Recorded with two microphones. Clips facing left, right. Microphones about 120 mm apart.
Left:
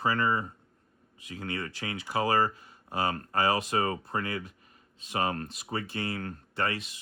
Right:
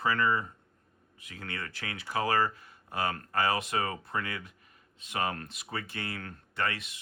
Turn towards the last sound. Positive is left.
turn(degrees=30)  # may be behind; listen again after turning